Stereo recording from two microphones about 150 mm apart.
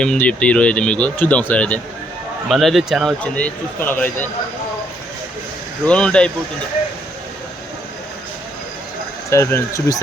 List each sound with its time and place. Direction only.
0.0 s speech: 5° left (ahead or behind)
5.8 s speech: 5° left (ahead or behind)
9.3 s speech: 20° left (ahead or behind)